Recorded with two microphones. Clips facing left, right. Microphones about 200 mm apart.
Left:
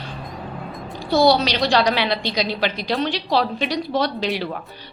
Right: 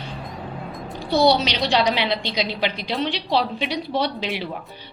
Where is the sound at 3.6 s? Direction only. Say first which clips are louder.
Left 2 dB; 45° left (ahead or behind).